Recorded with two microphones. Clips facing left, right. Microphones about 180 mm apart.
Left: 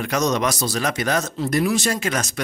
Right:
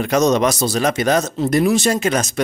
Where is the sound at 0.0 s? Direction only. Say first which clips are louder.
Right 6 dB; 25° right (ahead or behind).